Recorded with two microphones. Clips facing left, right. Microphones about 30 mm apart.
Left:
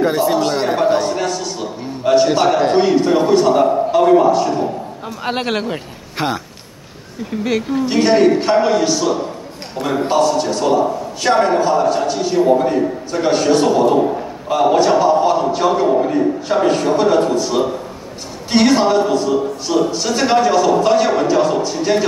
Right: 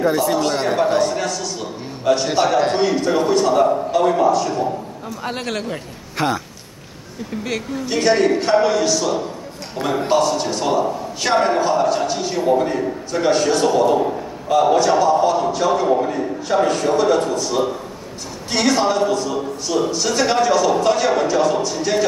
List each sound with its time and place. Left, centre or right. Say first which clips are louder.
0.1 s a man's voice: left 2 dB; centre
1.6 s a sound: left 3 dB; centre
2.2 s a man's voice: left 3 dB; centre
7.4 s a man's voice: left 7 dB; centre
9.8 s a man's voice: left 2 dB; centre; by 15.7 s left
15.9 s a man's voice: left 3 dB; centre
16.4 s a man's voice: right 2 dB; centre